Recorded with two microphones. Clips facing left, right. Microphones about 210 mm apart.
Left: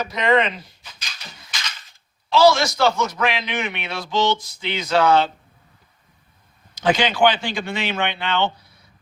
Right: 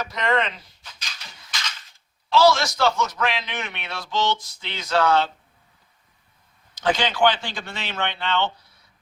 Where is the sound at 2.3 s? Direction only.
15° left (ahead or behind).